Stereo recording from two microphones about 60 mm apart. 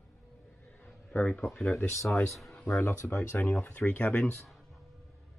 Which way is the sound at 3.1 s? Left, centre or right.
Left.